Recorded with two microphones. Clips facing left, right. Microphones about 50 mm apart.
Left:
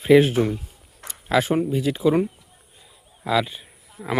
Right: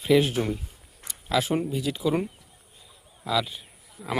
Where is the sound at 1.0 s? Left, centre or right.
Left.